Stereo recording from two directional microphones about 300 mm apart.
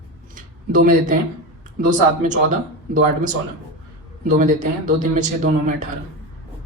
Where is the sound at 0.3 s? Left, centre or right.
Right.